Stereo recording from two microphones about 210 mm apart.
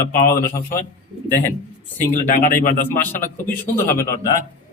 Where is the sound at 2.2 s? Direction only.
40° left (ahead or behind).